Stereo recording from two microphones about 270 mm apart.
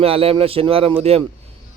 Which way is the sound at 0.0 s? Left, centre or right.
Right.